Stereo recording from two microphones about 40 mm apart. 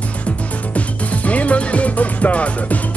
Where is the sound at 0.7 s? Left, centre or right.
Left.